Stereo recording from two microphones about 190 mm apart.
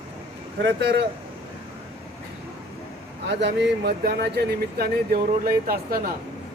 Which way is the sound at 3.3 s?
65° right (ahead or behind).